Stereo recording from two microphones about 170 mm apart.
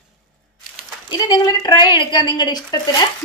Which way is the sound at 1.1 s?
25° left (ahead or behind).